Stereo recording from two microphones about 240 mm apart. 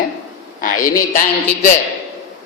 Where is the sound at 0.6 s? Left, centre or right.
Left.